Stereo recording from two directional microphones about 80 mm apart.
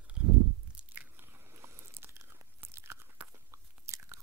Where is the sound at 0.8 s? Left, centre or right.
Right.